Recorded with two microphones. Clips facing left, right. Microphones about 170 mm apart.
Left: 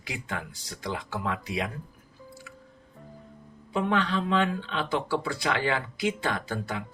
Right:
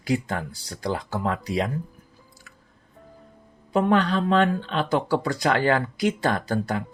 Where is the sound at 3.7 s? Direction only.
40° right (ahead or behind).